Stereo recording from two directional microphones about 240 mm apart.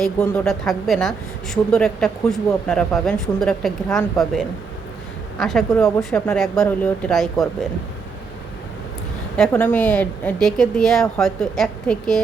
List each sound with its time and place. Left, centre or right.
0.0 s a woman's voice: centre
9.4 s a woman's voice: centre